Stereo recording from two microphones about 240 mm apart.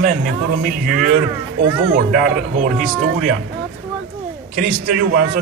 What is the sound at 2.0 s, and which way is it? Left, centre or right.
A man's voice, right.